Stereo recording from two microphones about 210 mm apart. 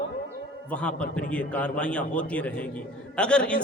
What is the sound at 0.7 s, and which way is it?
A man's voice, 5° left (ahead or behind).